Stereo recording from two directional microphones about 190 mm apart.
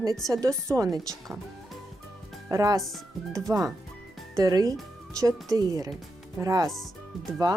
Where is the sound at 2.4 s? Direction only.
15° right (ahead or behind).